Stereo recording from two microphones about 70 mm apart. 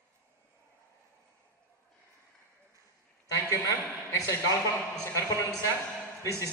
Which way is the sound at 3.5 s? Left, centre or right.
Left.